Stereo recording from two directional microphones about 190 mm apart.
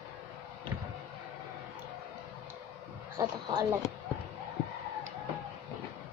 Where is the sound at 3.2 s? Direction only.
25° right (ahead or behind).